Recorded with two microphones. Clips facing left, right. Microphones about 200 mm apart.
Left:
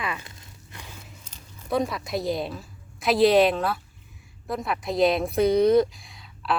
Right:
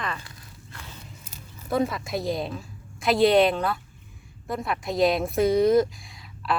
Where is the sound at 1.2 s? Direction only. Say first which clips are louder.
Right 3 dB; 5° right (ahead or behind).